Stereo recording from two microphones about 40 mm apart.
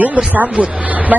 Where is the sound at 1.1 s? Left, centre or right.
Right.